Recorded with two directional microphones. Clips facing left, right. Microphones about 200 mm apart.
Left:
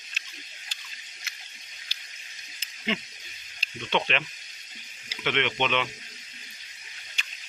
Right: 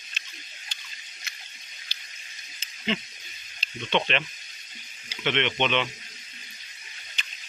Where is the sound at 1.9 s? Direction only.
10° left (ahead or behind).